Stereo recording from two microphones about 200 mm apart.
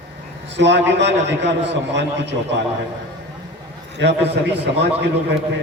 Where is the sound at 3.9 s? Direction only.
60° right (ahead or behind).